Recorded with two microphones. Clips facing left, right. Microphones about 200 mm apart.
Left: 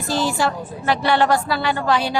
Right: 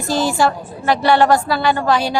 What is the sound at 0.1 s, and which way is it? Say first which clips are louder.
A woman's voice: right 4 dB; 45° right (ahead or behind).